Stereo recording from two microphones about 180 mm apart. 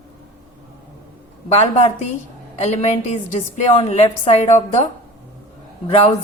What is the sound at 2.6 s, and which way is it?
A woman's voice, 40° left (ahead or behind).